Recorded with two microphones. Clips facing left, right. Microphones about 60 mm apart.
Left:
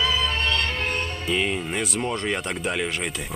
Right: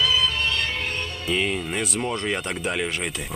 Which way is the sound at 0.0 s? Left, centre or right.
Left.